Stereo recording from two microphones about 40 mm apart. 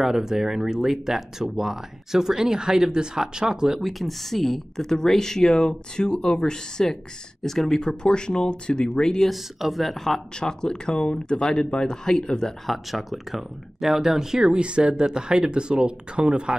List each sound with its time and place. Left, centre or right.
0.0 s speech: centre
3.8 s speech: centre
7.8 s speech: left
9.3 s speech: centre
10.4 s speech: centre
12.6 s speech: centre; by 16.5 s right